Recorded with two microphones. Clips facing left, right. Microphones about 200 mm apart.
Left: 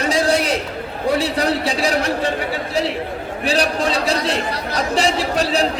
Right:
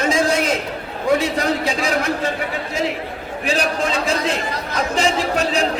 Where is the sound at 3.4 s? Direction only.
35° left (ahead or behind).